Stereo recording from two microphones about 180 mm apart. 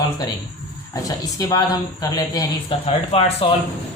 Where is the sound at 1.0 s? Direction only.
20° left (ahead or behind).